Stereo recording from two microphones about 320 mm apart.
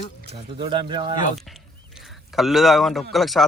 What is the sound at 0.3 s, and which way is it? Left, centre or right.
Speech, centre.